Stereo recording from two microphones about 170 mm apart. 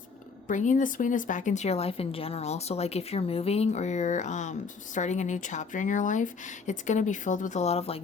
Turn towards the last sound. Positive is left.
turn(degrees=35)  # may be behind; listen again after turning